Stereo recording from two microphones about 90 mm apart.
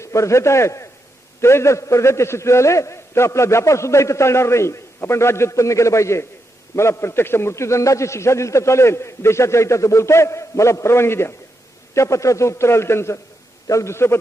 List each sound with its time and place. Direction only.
0.0 s a man's voice: 35° left (ahead or behind)